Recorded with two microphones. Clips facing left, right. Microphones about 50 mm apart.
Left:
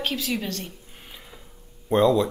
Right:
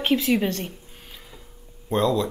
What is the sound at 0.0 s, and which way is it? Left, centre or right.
Speech, right.